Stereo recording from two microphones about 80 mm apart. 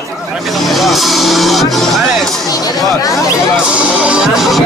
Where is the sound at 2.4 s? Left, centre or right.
Left.